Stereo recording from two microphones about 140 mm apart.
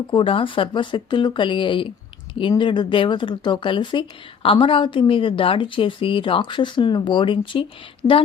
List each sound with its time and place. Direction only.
0.1 s a woman's voice: 40° left (ahead or behind)